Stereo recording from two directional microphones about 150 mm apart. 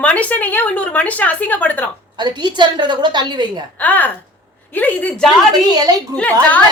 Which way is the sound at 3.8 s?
10° left (ahead or behind).